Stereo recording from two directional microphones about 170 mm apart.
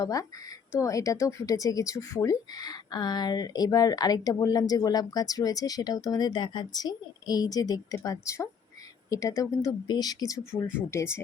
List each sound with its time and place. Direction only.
0.0 s speech: 20° left (ahead or behind)